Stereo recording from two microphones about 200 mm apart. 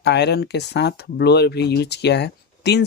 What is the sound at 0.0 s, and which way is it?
Speech, 55° left (ahead or behind).